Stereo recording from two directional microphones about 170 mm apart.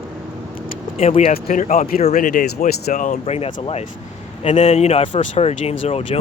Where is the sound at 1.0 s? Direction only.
35° left (ahead or behind).